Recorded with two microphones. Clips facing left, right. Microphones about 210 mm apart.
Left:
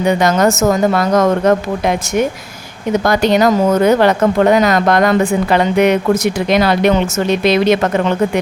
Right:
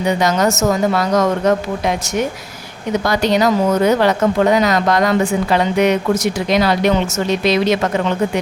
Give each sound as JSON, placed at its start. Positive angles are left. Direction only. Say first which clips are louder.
{"t": 0.0, "sound": "speech", "louder": "left 3 dB", "side_deg": 55}
{"t": 3.0, "sound": "a woman's voice", "louder": "left 3 dB", "side_deg": 50}